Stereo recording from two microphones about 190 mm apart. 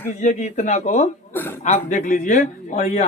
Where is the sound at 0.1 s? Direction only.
40° left (ahead or behind).